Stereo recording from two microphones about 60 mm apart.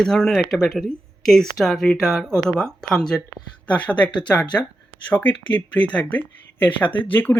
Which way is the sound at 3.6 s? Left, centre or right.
Left.